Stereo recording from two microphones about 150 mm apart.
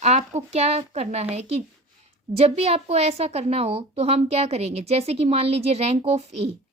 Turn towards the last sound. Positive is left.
turn(degrees=-45)  # may be behind; listen again after turning